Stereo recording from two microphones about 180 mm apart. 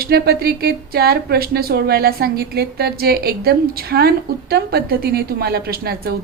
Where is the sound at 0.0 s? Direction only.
60° right (ahead or behind).